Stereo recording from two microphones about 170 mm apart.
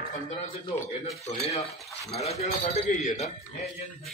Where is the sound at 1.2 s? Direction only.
35° left (ahead or behind).